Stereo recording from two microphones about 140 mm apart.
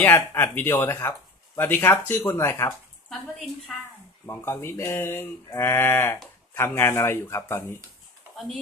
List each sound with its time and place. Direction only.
0.0 s speech: 15° left (ahead or behind)
4.3 s speech: 20° left (ahead or behind)